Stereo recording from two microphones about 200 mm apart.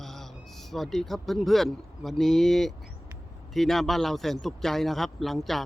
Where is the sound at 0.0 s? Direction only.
Centre (ahead or behind).